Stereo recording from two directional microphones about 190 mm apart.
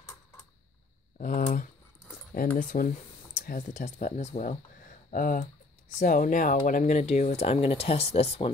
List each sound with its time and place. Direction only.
1.2 s speech: 45° left (ahead or behind)